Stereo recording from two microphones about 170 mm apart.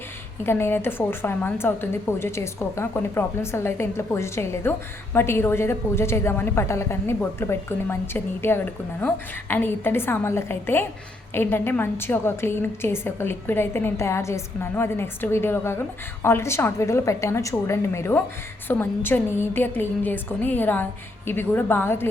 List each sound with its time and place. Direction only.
0.4 s a woman's voice: 15° left (ahead or behind)